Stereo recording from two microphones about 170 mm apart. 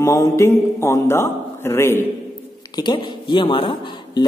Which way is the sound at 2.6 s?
25° left (ahead or behind).